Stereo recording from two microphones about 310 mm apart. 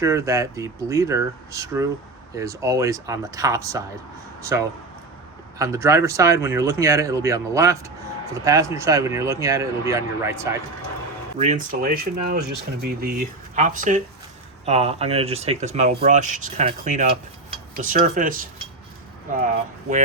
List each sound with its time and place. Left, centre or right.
0.0 s speech: centre
11.3 s speech: right